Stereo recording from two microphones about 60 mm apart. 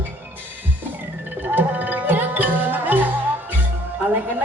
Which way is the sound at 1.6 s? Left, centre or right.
Right.